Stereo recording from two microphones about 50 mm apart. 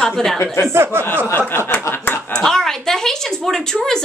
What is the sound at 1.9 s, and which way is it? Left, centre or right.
Snicker, left.